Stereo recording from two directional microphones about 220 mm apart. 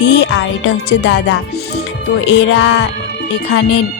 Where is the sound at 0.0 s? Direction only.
55° left (ahead or behind).